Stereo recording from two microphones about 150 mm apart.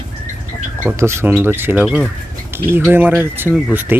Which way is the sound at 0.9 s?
20° right (ahead or behind).